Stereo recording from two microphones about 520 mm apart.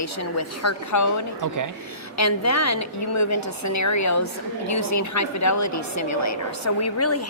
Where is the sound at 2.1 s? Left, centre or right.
Left.